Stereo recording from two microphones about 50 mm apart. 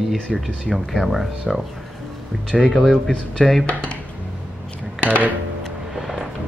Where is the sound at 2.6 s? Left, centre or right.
Centre.